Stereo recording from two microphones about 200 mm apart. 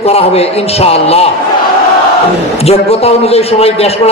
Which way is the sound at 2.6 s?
30° left (ahead or behind).